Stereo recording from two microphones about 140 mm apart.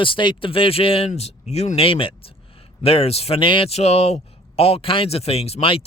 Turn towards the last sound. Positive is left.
turn(degrees=45)  # may be behind; listen again after turning